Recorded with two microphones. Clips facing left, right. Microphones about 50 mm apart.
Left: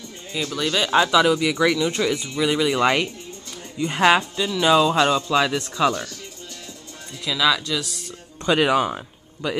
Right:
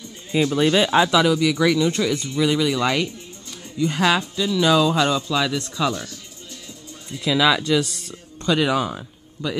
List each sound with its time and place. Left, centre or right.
0.3 s speech: right
0.8 s speech: centre
1.2 s speech: centre
2.7 s speech: left
4.4 s speech: centre
7.2 s speech: centre
8.5 s speech: centre